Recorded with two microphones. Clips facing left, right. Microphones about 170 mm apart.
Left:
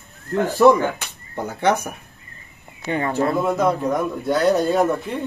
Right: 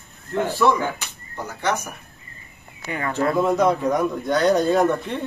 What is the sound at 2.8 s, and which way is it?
Speech, 30° left (ahead or behind).